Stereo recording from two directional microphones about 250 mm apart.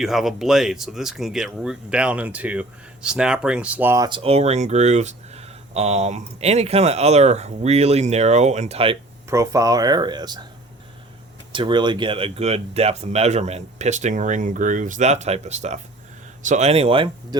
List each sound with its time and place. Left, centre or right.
0.0 s speech: centre
11.5 s speech: centre